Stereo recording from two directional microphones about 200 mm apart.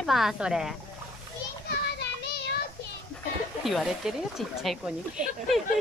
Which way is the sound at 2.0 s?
55° left (ahead or behind).